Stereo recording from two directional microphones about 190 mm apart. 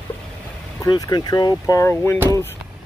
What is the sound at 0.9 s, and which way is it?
Speech, 20° left (ahead or behind).